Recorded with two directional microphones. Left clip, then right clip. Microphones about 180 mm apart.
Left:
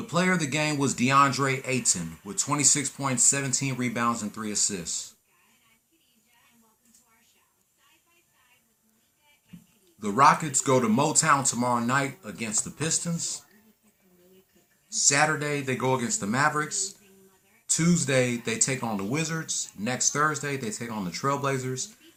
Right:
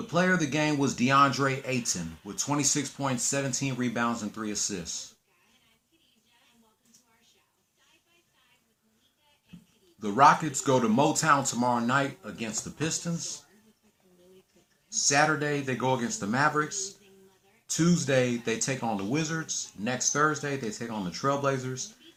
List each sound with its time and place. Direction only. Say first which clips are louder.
0.1 s speech: even; 20° left (ahead or behind)
10.0 s speech: even; 20° left (ahead or behind)
14.8 s speech: left 1 dB; 20° left (ahead or behind)